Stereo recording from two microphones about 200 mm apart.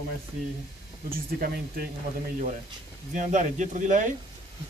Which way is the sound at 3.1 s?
35° right (ahead or behind).